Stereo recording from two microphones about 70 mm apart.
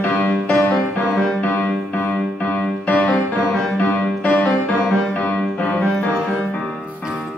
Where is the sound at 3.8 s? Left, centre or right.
Left.